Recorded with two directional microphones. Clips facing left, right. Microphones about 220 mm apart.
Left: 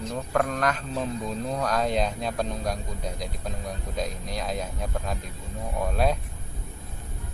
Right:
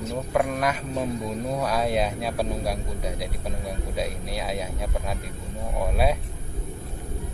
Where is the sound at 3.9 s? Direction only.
5° right (ahead or behind).